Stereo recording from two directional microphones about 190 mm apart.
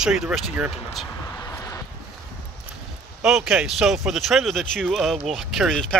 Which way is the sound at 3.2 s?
5° right (ahead or behind).